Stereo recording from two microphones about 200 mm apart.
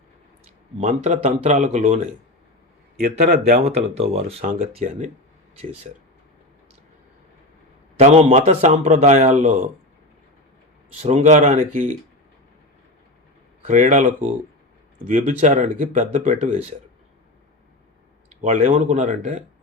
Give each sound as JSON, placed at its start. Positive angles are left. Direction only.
{"t": 0.8, "sound": "a man's voice", "side_deg": -35}
{"t": 3.0, "sound": "speech", "side_deg": -50}
{"t": 3.6, "sound": "a man's voice", "side_deg": -30}
{"t": 7.9, "sound": "a man's voice", "side_deg": -35}
{"t": 11.0, "sound": "a man's voice", "side_deg": -35}
{"t": 13.7, "sound": "a man's voice", "side_deg": -40}
{"t": 18.4, "sound": "a man's voice", "side_deg": -35}